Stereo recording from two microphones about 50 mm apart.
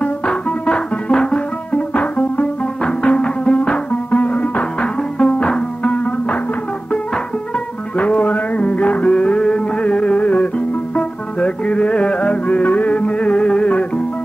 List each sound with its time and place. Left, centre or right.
0.0 s music: left
7.5 s music: left